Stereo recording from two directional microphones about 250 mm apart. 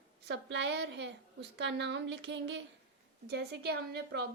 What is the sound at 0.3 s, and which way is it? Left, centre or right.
A woman's voice, right.